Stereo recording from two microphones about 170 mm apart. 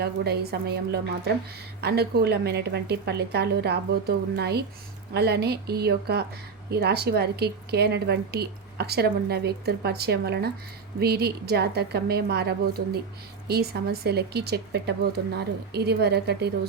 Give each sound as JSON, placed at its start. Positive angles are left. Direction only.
{"t": 0.0, "sound": "a woman's voice", "side_deg": -70}